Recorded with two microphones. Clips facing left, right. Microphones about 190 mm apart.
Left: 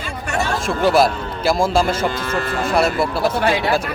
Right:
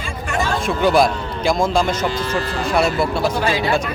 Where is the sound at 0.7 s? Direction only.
Centre (ahead or behind).